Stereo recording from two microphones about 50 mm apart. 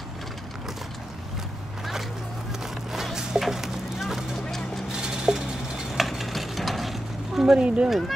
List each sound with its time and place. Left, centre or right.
2.6 s a sound: centre
4.5 s vehicle: centre
5.0 s mechanisms: centre
5.9 s mechanisms: centre
7.5 s speech: right